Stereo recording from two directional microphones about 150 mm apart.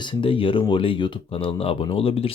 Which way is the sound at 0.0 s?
35° left (ahead or behind).